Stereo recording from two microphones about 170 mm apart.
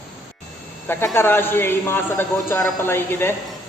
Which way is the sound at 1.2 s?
15° left (ahead or behind).